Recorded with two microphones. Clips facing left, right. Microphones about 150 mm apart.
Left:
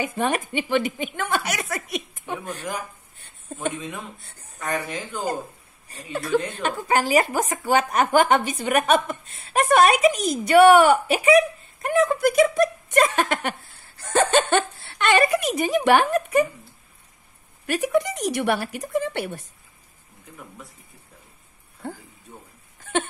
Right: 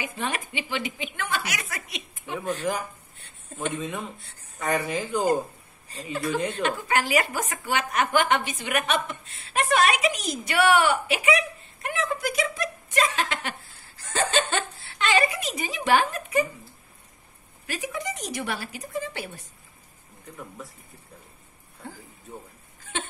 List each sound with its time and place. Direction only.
0.0 s speech: 50° left (ahead or behind)
3.7 s speech: centre (ahead or behind)
6.6 s speech: 40° left (ahead or behind); by 16.4 s 55° left (ahead or behind)
17.6 s a woman's voice: 65° left (ahead or behind)
22.9 s a sound: 55° left (ahead or behind)